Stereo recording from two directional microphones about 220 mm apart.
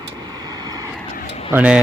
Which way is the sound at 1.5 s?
5° right (ahead or behind).